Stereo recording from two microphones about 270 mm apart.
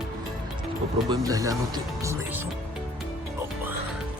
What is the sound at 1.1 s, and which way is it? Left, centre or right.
Speech, centre.